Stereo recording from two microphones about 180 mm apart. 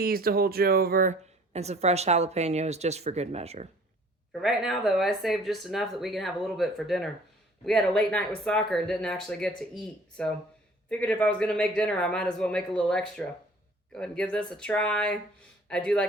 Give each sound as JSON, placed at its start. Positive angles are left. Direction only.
{"t": 0.0, "sound": "speech", "side_deg": -55}
{"t": 1.5, "sound": "speech", "side_deg": -35}
{"t": 4.3, "sound": "speech", "side_deg": 0}